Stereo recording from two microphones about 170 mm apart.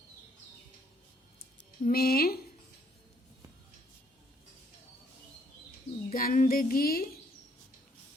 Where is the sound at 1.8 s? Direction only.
60° left (ahead or behind).